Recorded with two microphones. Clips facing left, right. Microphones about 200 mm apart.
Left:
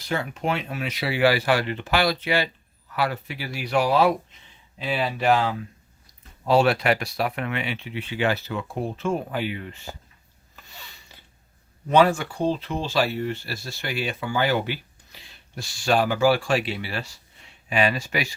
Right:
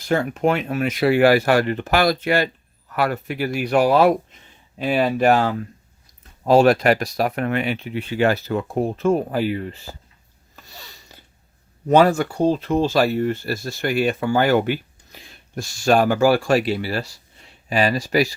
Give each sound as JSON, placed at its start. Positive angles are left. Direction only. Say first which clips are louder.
{"t": 0.0, "sound": "speech", "louder": "right 8 dB", "side_deg": -50}
{"t": 10.5, "sound": "a sound", "louder": "right 3 dB", "side_deg": -40}
{"t": 11.9, "sound": "speech", "louder": "right 4 dB", "side_deg": -40}